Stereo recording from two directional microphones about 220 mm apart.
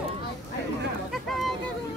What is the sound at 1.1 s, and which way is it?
Speech, centre (ahead or behind).